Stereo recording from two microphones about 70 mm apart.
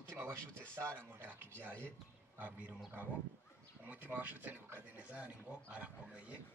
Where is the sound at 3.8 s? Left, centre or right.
Right.